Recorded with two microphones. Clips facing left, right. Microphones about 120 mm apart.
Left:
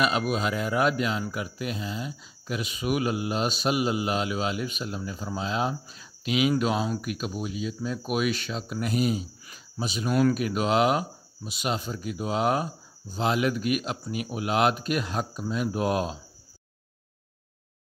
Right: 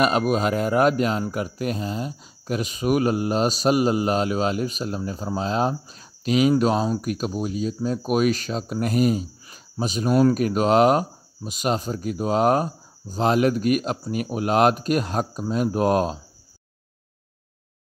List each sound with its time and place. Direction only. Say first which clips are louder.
0.3 s speech: right 6 dB; 45° right (ahead or behind)